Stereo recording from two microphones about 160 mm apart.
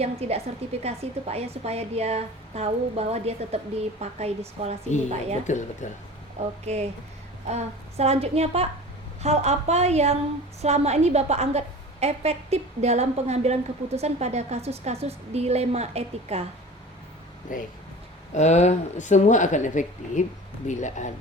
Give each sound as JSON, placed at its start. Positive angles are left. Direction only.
{"t": 0.0, "sound": "a woman's voice", "side_deg": -40}
{"t": 5.5, "sound": "speech", "side_deg": 50}
{"t": 6.7, "sound": "a woman's voice", "side_deg": -40}
{"t": 17.5, "sound": "speech", "side_deg": 55}
{"t": 18.3, "sound": "speech", "side_deg": 45}